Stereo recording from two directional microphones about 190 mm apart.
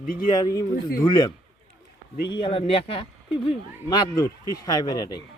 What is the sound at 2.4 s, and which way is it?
Speech, 30° left (ahead or behind).